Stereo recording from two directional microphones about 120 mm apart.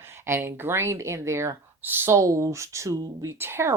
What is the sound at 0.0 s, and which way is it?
Speech, 20° right (ahead or behind).